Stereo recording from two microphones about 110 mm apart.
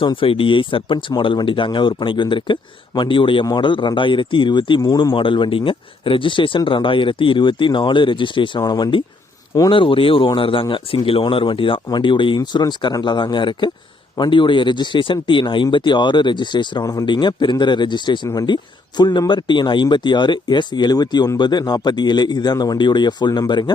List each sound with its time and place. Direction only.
0.0 s speech: 50° left (ahead or behind)
4.8 s a man's voice: 35° left (ahead or behind)
5.1 s speech: 50° left (ahead or behind)
8.6 s a man's voice: 40° left (ahead or behind)
9.7 s a man's voice: 55° left (ahead or behind)